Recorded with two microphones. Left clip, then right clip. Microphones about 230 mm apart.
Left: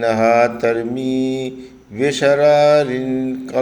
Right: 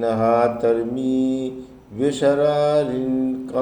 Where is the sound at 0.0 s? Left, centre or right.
Left.